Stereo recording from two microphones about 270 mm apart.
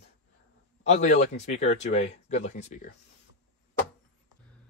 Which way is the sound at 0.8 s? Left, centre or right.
Left.